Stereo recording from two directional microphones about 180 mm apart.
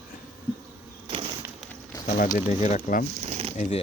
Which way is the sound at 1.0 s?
30° right (ahead or behind).